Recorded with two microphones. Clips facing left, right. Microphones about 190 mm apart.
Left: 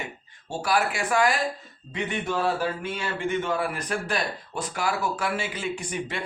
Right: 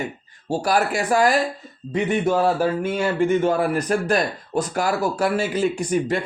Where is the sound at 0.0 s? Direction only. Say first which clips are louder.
Right 8 dB; 40° right (ahead or behind).